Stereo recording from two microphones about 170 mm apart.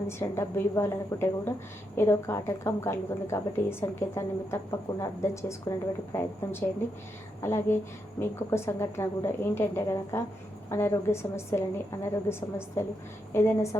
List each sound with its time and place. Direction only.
0.1 s a woman's voice: 15° left (ahead or behind)